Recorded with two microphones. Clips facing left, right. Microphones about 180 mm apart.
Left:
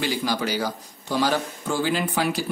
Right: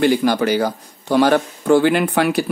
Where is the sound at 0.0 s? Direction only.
60° right (ahead or behind).